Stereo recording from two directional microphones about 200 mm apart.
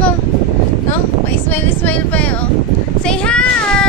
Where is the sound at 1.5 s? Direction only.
10° left (ahead or behind).